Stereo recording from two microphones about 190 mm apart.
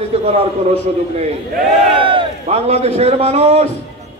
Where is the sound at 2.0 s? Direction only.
30° right (ahead or behind).